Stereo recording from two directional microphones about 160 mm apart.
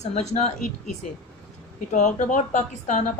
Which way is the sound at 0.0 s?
45° left (ahead or behind).